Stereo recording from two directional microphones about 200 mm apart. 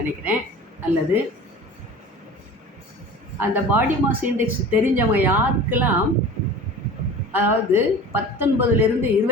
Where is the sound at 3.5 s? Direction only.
10° right (ahead or behind).